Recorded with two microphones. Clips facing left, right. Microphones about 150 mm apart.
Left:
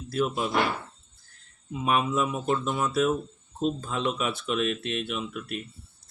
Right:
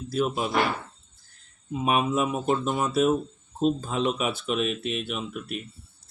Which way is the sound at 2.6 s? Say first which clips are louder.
Right 2 dB; 25° right (ahead or behind).